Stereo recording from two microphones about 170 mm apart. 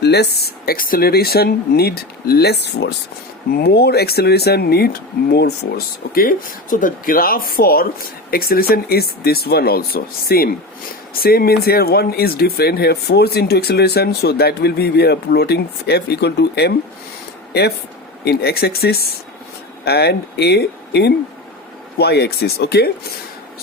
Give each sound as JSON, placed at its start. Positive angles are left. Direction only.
{"t": 0.0, "sound": "speech", "side_deg": 75}